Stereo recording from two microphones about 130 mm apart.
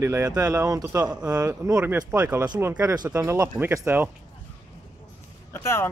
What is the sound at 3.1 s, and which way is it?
Speech, 20° right (ahead or behind).